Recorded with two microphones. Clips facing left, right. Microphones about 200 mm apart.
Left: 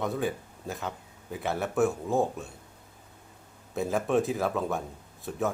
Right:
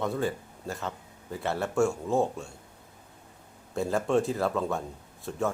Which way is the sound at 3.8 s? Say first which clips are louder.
Even; centre (ahead or behind).